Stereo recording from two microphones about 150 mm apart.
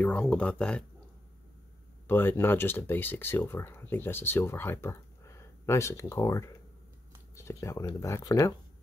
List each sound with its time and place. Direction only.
0.0 s speech: 10° left (ahead or behind)
2.0 s speech: 15° left (ahead or behind)